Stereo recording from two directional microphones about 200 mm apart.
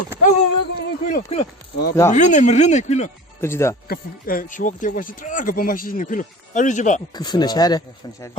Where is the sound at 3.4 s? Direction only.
15° left (ahead or behind).